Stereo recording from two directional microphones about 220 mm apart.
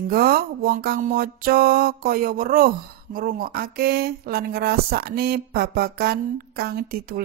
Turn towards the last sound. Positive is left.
turn(degrees=-40)  # may be behind; listen again after turning